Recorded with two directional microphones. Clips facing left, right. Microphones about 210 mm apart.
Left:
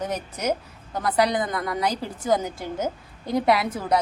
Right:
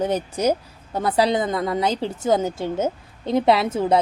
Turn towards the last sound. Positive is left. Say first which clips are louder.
# right 4 dB
turn(degrees=-25)  # may be behind; listen again after turning